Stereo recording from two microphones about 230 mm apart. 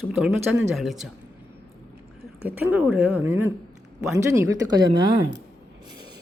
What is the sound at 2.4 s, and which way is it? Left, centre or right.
A woman's voice, centre.